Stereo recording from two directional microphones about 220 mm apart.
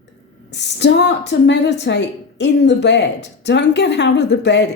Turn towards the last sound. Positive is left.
turn(degrees=50)  # may be behind; listen again after turning